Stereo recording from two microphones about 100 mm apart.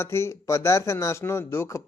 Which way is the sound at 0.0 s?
25° left (ahead or behind).